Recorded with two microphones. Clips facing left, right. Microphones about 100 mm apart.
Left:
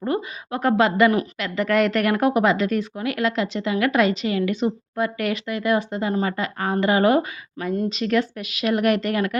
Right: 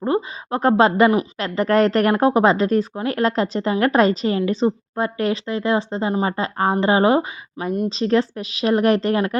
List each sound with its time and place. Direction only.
0.0 s speech: 30° right (ahead or behind)